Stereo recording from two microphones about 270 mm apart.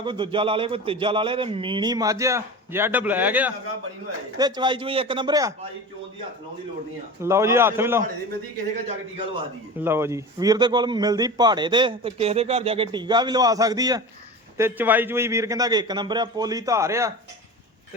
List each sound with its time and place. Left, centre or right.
0.0 s a man's voice: centre
7.2 s a man's voice: centre
8.9 s a man's voice: centre
9.8 s a man's voice: centre